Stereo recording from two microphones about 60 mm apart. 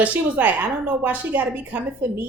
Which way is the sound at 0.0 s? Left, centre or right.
Right.